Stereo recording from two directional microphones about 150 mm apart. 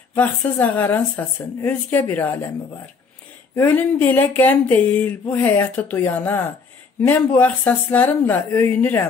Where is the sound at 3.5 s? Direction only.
10° left (ahead or behind).